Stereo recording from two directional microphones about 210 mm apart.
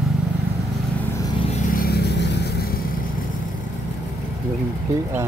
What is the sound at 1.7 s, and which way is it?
Vehicle, 45° left (ahead or behind).